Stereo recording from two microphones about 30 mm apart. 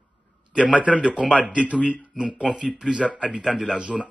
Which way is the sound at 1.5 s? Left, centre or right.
Right.